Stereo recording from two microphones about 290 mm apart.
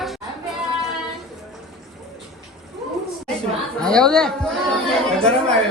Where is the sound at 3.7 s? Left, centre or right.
Centre.